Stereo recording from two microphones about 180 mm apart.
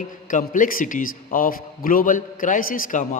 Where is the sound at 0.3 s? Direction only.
45° left (ahead or behind).